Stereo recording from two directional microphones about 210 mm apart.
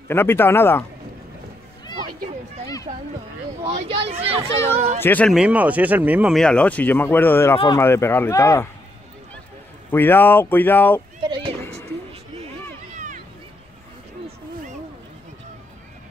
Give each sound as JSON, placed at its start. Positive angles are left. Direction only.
{"t": 0.1, "sound": "speech", "side_deg": 10}
{"t": 3.9, "sound": "speech", "side_deg": -25}
{"t": 5.0, "sound": "speech", "side_deg": 5}
{"t": 7.5, "sound": "speech", "side_deg": 25}
{"t": 7.8, "sound": "speech", "side_deg": 10}
{"t": 9.8, "sound": "speech", "side_deg": 10}
{"t": 11.7, "sound": "a sound", "side_deg": -30}